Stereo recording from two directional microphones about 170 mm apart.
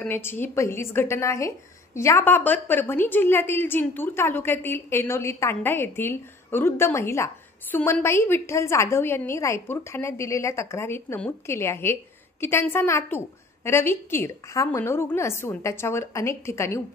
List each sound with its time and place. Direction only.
0.0 s a woman's voice: 10° left (ahead or behind)